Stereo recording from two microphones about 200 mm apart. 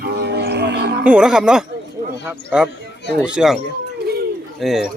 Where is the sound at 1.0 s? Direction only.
5° right (ahead or behind).